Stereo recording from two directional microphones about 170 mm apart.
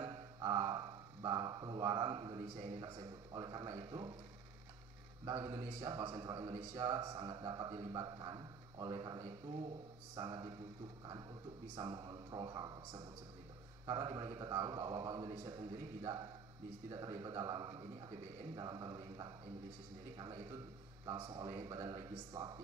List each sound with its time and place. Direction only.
0.0 s a sound: 25° right (ahead or behind)
2.8 s a man's voice: 25° right (ahead or behind)
5.2 s a man's voice: 20° right (ahead or behind)
11.7 s a man's voice: 25° right (ahead or behind)